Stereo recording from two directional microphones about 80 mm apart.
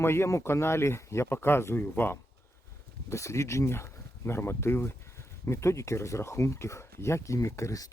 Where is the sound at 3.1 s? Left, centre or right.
Left.